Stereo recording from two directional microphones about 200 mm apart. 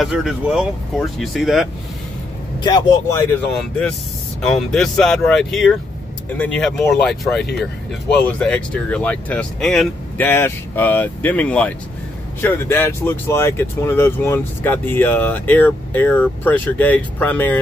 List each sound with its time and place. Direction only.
0.0 s speech: centre (ahead or behind)
2.6 s speech: 20° left (ahead or behind)
4.4 s speech: centre (ahead or behind)